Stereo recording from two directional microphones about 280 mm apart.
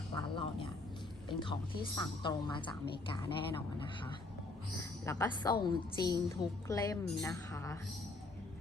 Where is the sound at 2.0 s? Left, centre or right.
Centre.